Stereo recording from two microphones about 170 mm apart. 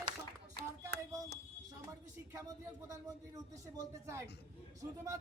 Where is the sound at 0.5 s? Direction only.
75° right (ahead or behind).